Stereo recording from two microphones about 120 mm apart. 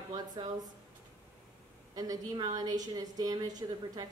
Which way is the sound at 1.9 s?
30° right (ahead or behind).